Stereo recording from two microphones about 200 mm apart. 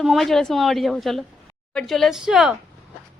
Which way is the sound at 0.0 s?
Centre (ahead or behind).